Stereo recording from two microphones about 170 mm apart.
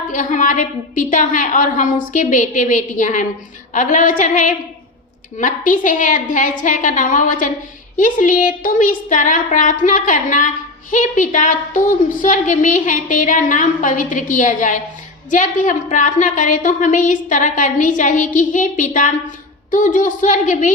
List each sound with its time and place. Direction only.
0.1 s a woman's voice: 50° left (ahead or behind)